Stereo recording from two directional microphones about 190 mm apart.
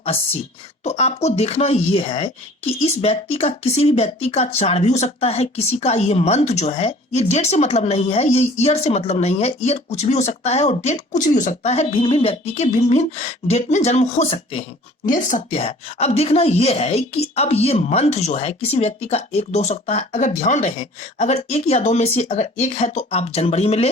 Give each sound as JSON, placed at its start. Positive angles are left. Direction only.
{"t": 0.9, "sound": "speech", "side_deg": 35}